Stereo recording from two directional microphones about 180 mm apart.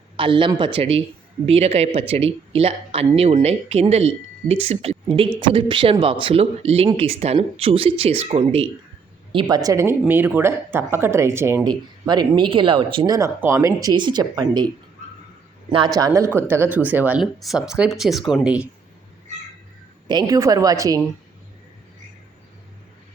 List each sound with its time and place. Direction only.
0.2 s a woman's voice: 30° right (ahead or behind)
9.6 s speech: 15° right (ahead or behind)
13.1 s speech: 15° right (ahead or behind)
16.0 s speech: 20° right (ahead or behind)
20.1 s speech: 20° right (ahead or behind)